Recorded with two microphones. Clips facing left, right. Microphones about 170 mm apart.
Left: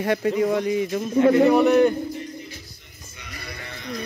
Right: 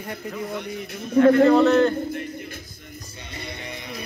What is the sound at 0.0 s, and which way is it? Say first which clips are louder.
Speech: left 11 dB; 90° left.